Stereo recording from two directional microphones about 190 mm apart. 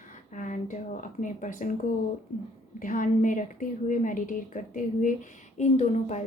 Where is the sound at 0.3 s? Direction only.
45° left (ahead or behind).